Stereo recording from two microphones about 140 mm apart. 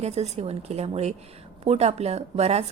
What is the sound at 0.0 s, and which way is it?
A woman's voice, 50° right (ahead or behind).